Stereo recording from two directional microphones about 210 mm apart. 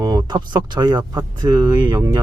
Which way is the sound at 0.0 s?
15° right (ahead or behind).